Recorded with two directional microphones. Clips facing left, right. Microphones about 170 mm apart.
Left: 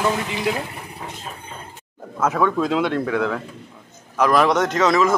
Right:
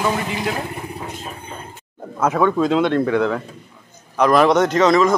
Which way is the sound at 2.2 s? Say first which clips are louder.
Right 3 dB; centre (ahead or behind).